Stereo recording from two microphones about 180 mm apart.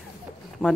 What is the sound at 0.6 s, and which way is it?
Speech, 5° left (ahead or behind).